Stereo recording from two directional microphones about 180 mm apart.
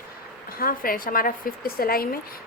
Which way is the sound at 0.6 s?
55° left (ahead or behind).